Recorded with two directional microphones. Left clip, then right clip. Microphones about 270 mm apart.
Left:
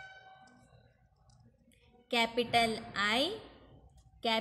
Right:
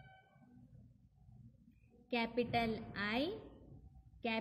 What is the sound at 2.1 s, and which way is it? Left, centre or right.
A woman's voice, left.